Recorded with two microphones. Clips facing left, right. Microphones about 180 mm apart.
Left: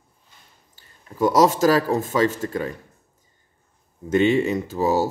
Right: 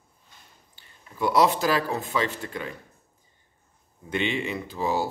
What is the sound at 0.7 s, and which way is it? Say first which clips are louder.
Speech: left 7 dB; 40° left (ahead or behind).